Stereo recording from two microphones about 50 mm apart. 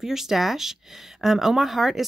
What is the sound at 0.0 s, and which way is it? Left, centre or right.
Speech, centre.